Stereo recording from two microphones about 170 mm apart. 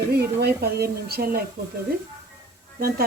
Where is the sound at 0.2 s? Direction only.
70° right (ahead or behind).